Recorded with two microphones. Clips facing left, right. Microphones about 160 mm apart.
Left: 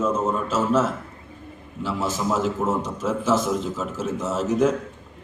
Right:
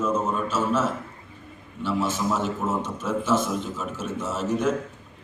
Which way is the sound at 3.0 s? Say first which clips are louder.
Left 1 dB; 90° left.